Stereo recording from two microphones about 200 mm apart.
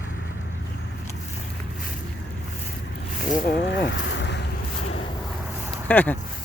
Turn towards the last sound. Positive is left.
turn(degrees=10)  # may be behind; listen again after turning